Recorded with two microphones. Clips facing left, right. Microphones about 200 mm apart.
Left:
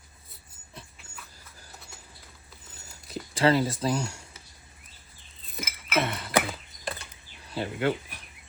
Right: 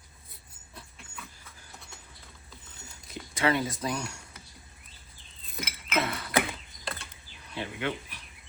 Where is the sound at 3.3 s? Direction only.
30° left (ahead or behind).